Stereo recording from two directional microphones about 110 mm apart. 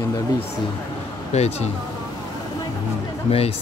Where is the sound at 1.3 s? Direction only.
75° left (ahead or behind).